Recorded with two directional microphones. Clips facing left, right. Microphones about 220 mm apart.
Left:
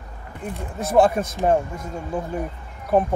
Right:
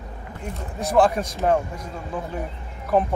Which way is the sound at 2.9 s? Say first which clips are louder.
Left 2 dB; 15° left (ahead or behind).